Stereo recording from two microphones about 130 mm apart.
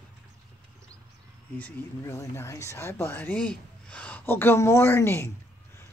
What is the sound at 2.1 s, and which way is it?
Speech, 20° left (ahead or behind).